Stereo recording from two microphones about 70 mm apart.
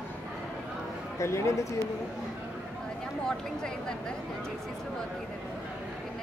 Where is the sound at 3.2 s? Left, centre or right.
Centre.